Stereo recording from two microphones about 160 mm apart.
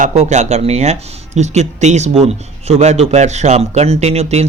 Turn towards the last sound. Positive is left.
turn(degrees=-40)  # may be behind; listen again after turning